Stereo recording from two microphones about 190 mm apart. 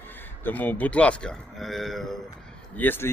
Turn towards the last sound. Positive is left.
turn(degrees=10)  # may be behind; listen again after turning